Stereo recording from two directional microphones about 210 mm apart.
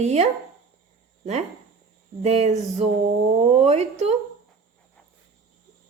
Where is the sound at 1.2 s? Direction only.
30° right (ahead or behind).